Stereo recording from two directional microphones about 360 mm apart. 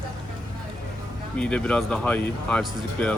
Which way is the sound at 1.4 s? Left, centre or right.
Centre.